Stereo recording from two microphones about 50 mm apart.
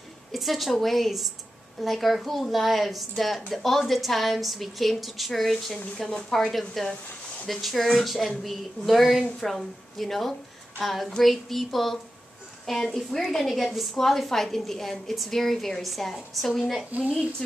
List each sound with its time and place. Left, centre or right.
0.3 s a woman's voice: centre
16.9 s a woman's voice: right